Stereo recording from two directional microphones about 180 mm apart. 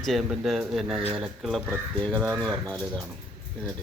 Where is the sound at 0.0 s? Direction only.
Centre (ahead or behind).